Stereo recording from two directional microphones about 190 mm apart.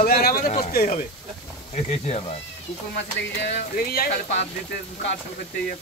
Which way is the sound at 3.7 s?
50° left (ahead or behind).